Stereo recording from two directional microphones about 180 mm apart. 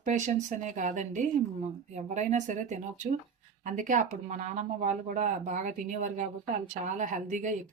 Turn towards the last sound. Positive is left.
turn(degrees=-45)  # may be behind; listen again after turning